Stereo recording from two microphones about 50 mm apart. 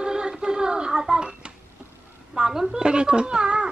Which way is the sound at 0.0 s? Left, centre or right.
Centre.